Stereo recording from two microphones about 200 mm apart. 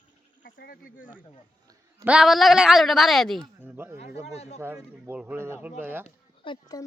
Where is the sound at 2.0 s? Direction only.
5° right (ahead or behind).